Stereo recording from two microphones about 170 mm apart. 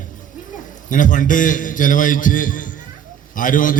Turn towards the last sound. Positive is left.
turn(degrees=50)  # may be behind; listen again after turning